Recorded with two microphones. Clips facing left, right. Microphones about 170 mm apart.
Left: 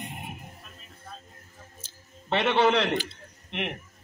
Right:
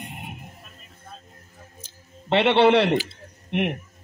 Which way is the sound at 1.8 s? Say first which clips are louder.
Right 3 dB; 25° right (ahead or behind).